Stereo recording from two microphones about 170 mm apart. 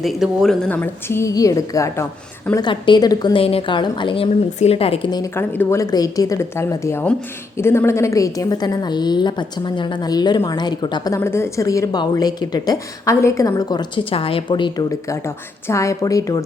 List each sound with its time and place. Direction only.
0.0 s a woman's voice: centre (ahead or behind); by 5.3 s 25° left (ahead or behind)
5.4 s a woman's voice: 15° left (ahead or behind)